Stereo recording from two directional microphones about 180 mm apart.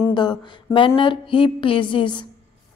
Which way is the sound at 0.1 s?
25° left (ahead or behind).